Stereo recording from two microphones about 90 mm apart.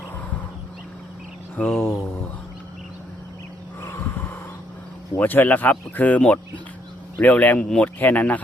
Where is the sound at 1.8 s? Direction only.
25° left (ahead or behind).